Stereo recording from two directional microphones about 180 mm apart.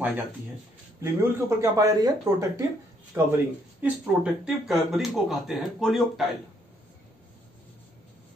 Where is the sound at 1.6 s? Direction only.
20° right (ahead or behind); by 6.2 s centre (ahead or behind).